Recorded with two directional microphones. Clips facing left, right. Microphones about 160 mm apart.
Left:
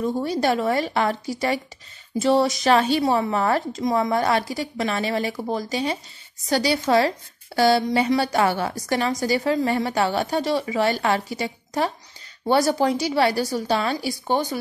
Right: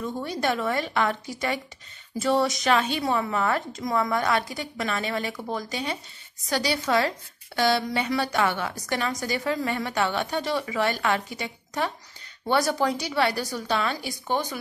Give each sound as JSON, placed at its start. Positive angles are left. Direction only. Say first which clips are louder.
{"t": 0.0, "sound": "a woman's voice", "louder": "left 6 dB", "side_deg": 35}